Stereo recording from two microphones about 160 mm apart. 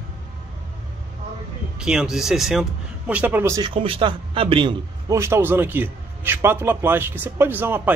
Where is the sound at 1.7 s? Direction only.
5° right (ahead or behind).